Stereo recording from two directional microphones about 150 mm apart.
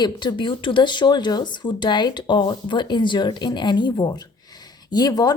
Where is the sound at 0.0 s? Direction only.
30° left (ahead or behind).